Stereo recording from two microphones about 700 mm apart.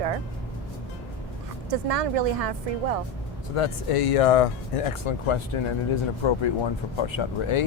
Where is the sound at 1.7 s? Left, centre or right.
Right.